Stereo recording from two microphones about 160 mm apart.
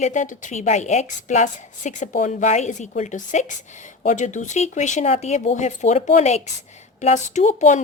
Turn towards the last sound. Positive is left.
turn(degrees=50)  # may be behind; listen again after turning